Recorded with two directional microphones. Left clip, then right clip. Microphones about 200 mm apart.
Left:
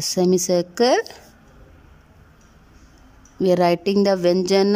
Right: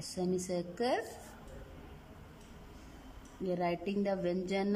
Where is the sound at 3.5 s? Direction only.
55° left (ahead or behind).